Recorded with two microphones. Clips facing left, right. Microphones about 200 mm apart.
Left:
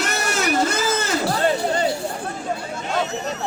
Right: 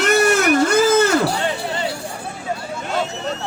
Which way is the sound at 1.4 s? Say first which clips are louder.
Left 3 dB; 40° left (ahead or behind).